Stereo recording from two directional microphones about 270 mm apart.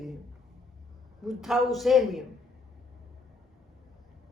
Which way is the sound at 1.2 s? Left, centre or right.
Centre.